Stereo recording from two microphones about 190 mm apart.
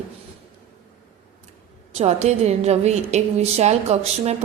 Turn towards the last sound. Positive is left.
turn(degrees=-35)  # may be behind; listen again after turning